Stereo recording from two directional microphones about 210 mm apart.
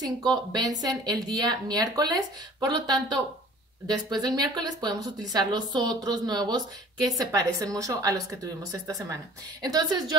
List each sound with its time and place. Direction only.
0.0 s a woman's voice: 20° right (ahead or behind)